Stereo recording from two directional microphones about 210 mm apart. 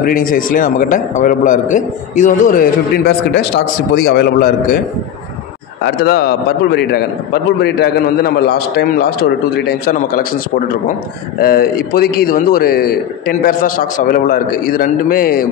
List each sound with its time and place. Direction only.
0.0 s a man's voice: 40° left (ahead or behind)
5.9 s a man's voice: 45° left (ahead or behind)
11.3 s a man's voice: 45° left (ahead or behind)